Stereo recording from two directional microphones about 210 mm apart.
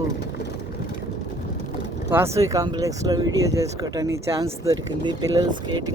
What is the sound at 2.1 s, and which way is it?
Speech, 10° right (ahead or behind).